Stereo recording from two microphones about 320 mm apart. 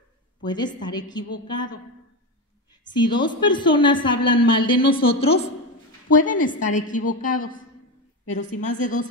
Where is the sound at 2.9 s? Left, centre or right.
Centre.